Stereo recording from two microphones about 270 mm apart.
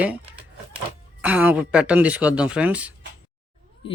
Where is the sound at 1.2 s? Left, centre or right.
Centre.